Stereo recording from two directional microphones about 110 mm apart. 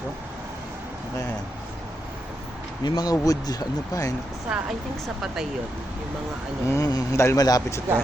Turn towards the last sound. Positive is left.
turn(degrees=35)  # may be behind; listen again after turning